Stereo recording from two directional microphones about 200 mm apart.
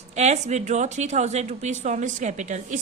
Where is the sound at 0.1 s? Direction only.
35° right (ahead or behind).